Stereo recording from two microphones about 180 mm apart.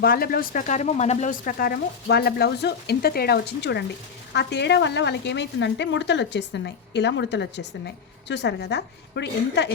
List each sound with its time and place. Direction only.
0.0 s a woman's voice: 55° left (ahead or behind); by 9.7 s 70° left (ahead or behind)